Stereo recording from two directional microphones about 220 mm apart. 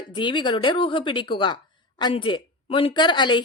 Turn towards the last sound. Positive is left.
turn(degrees=20)  # may be behind; listen again after turning